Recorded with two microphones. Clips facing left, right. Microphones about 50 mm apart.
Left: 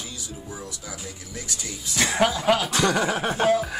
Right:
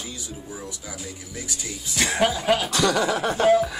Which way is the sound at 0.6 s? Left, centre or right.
Centre.